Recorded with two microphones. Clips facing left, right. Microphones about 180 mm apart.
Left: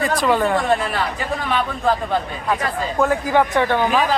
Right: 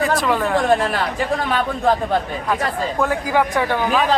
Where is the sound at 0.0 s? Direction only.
Centre (ahead or behind).